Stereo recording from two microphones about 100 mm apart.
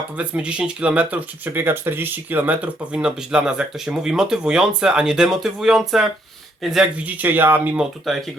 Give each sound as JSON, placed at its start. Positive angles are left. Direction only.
{"t": 0.2, "sound": "speech", "side_deg": -10}
{"t": 7.1, "sound": "speech", "side_deg": -15}